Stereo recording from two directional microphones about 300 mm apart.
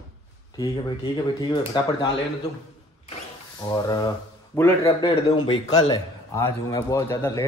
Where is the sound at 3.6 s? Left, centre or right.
Centre.